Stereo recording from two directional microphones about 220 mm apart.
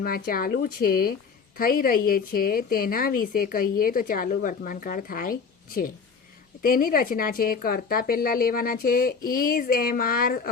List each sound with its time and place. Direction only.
0.0 s a woman's voice: 40° left (ahead or behind)